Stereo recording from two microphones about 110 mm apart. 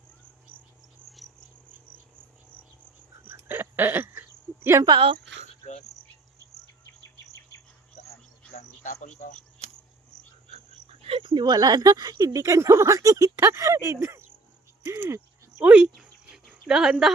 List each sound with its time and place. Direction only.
1.1 s cricket: centre (ahead or behind)
3.2 s cricket: 20° right (ahead or behind)
4.9 s speech: 50° right (ahead or behind)
5.9 s cricket: centre (ahead or behind)
10.5 s speech: 60° right (ahead or behind); by 14.3 s 25° right (ahead or behind)
14.8 s cricket: 25° right (ahead or behind)
15.6 s speech: 10° right (ahead or behind)